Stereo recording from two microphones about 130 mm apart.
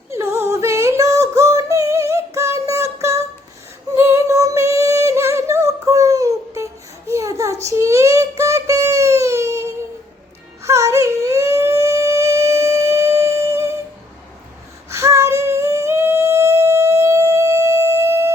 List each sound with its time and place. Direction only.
0.1 s female singing: 20° right (ahead or behind)
3.9 s a sound: 20° right (ahead or behind)
7.1 s child singing: 25° right (ahead or behind)
10.6 s music: 25° right (ahead or behind)
14.8 s humming: 20° right (ahead or behind)